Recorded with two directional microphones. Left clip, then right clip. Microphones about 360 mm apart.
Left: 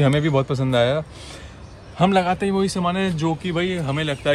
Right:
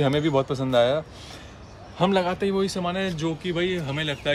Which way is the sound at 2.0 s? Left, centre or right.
Centre.